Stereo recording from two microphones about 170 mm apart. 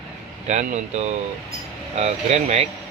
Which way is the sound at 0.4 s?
40° right (ahead or behind).